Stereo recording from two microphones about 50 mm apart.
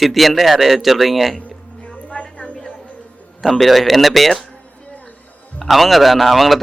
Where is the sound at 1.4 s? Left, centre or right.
Left.